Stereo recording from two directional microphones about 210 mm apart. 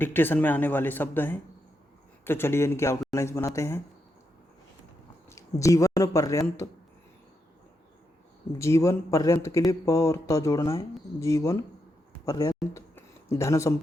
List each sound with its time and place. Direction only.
0.0 s speech: 10° left (ahead or behind)
5.3 s speech: 15° left (ahead or behind)
8.5 s speech: 15° left (ahead or behind)
12.7 s a sound: 10° left (ahead or behind)